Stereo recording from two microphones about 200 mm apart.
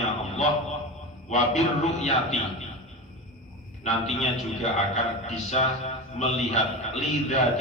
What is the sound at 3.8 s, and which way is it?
A man's voice, 35° left (ahead or behind).